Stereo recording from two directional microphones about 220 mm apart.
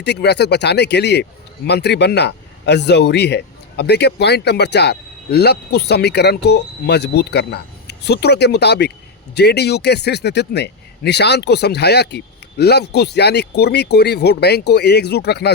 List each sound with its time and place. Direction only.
0.0 s speech: 50° left (ahead or behind)